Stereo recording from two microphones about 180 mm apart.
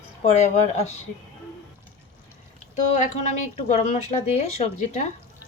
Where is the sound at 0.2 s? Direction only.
40° left (ahead or behind).